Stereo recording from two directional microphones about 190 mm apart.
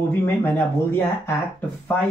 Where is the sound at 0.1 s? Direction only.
10° left (ahead or behind).